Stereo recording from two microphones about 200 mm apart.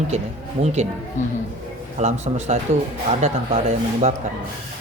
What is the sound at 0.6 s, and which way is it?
Speech, 35° right (ahead or behind).